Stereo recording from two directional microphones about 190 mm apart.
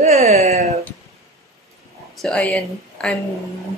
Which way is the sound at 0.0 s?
35° right (ahead or behind).